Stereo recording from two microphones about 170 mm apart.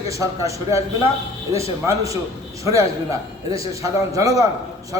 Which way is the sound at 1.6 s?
20° right (ahead or behind).